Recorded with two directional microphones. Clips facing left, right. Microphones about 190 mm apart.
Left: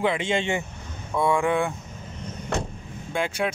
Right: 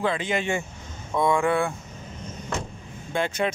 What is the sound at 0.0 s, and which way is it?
Speech, 25° left (ahead or behind).